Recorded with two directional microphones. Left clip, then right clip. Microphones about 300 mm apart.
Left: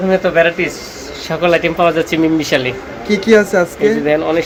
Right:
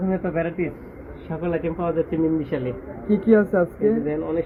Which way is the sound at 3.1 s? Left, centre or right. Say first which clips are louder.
Left 8 dB; centre.